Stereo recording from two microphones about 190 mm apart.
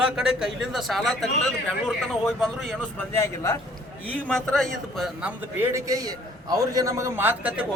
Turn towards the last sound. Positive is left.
turn(degrees=-5)  # may be behind; listen again after turning